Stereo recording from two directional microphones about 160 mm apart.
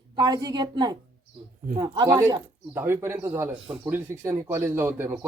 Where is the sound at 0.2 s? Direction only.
25° right (ahead or behind).